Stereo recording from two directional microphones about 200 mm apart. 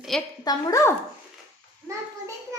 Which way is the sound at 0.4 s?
15° left (ahead or behind).